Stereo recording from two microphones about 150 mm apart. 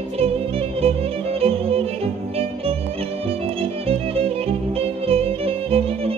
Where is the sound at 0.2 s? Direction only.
40° right (ahead or behind).